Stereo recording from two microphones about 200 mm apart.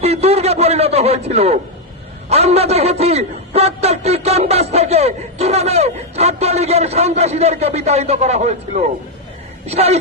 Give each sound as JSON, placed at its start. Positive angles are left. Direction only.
{"t": 0.0, "sound": "a man's voice", "side_deg": -30}